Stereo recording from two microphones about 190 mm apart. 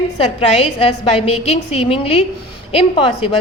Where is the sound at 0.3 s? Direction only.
35° left (ahead or behind).